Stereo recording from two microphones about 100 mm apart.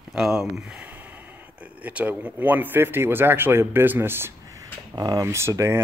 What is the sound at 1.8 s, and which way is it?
Speech, 15° right (ahead or behind).